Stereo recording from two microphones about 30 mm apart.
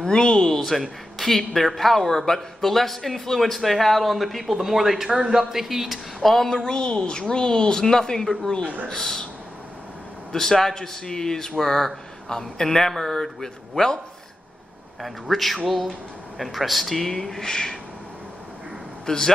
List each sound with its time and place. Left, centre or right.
0.0 s a woman's voice: left
0.6 s speech: centre
6.2 s speech: centre
6.6 s a woman's voice: left
10.3 s speech: centre
15.0 s speech: centre
17.3 s speech: centre
19.0 s a woman's voice: centre